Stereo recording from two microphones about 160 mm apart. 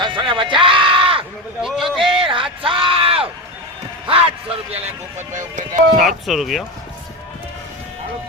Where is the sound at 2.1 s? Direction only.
30° right (ahead or behind); by 5.8 s 50° right (ahead or behind).